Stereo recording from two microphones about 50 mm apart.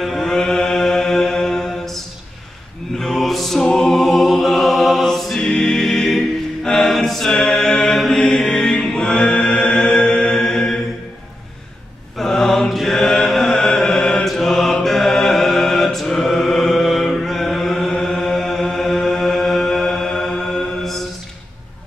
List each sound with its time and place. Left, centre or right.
0.0 s mantra: centre
3.0 s music: centre
3.6 s a capella: left
3.9 s music: centre
12.2 s mantra: centre